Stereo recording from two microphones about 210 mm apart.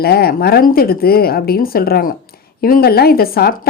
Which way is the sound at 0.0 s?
45° left (ahead or behind).